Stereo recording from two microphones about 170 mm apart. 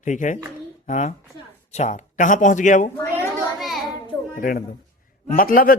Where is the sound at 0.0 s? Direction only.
45° left (ahead or behind).